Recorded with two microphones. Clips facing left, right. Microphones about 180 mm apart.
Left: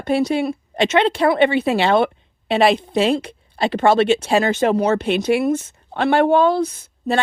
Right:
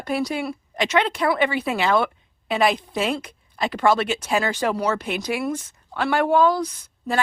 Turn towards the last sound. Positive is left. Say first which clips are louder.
# left 5 dB
turn(degrees=25)  # may be behind; listen again after turning